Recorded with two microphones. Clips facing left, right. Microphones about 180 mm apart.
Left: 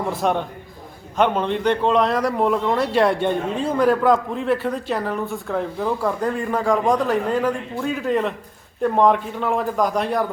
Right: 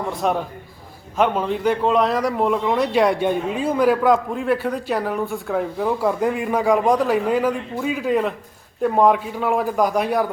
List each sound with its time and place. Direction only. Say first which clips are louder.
0.1 s a man's voice: even; centre (ahead or behind)